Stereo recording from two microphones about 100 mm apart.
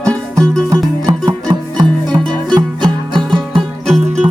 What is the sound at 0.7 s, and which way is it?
Music, 35° right (ahead or behind).